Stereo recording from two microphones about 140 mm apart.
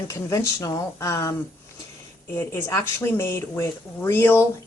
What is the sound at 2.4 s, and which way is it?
Speech, 20° left (ahead or behind).